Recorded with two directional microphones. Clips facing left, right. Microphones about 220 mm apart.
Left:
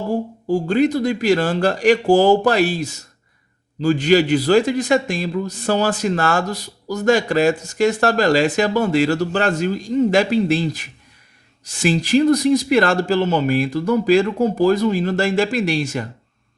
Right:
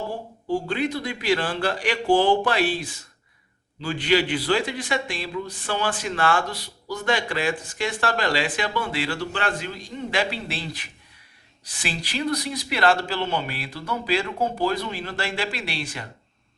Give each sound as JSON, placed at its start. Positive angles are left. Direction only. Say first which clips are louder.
{"t": 0.1, "sound": "a man's voice", "louder": "left 7 dB", "side_deg": 45}